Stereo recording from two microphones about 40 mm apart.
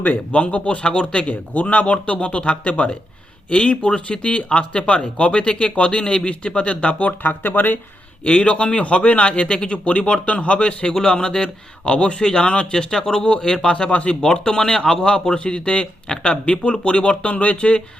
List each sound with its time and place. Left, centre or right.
0.0 s a man's voice: left
7.2 s speech: left
8.2 s a man's voice: left